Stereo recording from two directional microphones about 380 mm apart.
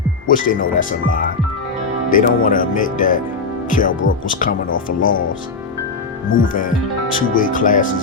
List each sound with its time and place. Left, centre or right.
0.3 s speech: left
6.3 s speech: left